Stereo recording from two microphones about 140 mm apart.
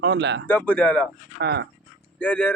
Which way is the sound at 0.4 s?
10° left (ahead or behind).